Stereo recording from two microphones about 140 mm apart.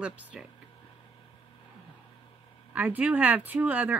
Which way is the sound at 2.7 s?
10° right (ahead or behind).